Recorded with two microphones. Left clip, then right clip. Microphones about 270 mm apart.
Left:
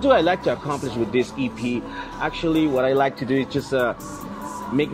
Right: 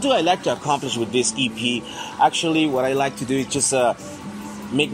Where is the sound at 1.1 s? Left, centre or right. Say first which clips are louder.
Right 4 dB; centre.